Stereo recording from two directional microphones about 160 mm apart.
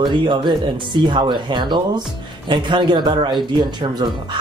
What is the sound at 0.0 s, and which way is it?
A man's voice, 30° right (ahead or behind).